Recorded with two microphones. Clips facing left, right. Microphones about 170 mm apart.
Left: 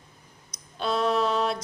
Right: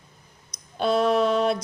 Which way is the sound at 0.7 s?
55° right (ahead or behind).